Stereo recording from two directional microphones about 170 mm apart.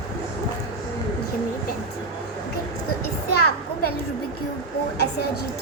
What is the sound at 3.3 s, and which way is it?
Children playing, 65° left (ahead or behind).